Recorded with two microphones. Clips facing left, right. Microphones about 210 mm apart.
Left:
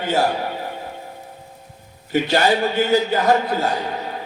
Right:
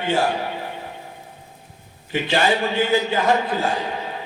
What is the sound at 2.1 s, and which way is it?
A man's voice, 40° left (ahead or behind).